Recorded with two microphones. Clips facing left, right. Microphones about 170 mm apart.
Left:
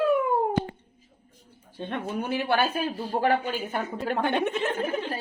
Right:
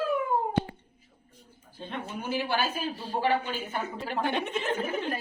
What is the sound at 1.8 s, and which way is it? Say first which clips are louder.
Speech: left 6 dB; 65° left (ahead or behind).